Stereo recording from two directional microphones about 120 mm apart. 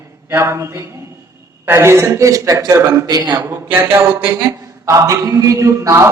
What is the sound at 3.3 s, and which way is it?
A man's voice, 20° right (ahead or behind).